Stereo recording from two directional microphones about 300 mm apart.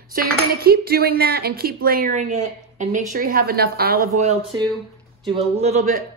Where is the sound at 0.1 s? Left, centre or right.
Right.